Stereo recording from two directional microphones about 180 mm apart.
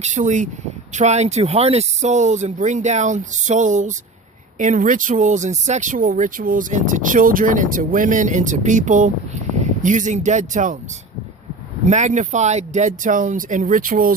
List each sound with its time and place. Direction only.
0.0 s speech: 40° right (ahead or behind)
11.9 s speech: 40° right (ahead or behind)